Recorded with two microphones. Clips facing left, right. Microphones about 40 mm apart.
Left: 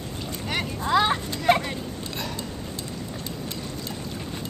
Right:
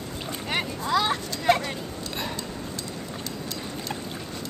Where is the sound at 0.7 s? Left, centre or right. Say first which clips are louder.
Left 4 dB; left.